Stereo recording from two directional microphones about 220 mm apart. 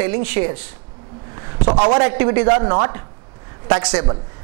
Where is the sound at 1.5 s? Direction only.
30° right (ahead or behind).